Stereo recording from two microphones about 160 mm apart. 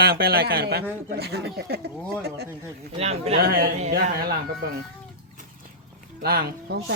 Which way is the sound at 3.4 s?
70° right (ahead or behind).